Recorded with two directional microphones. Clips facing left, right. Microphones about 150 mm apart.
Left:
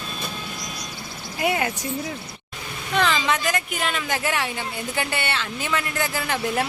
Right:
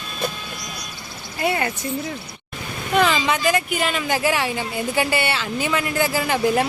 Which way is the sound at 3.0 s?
10° right (ahead or behind).